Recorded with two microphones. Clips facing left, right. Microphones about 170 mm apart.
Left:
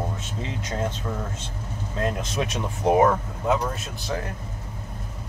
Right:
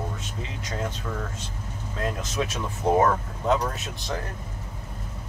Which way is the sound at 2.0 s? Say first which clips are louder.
Left 2 dB; 20° left (ahead or behind).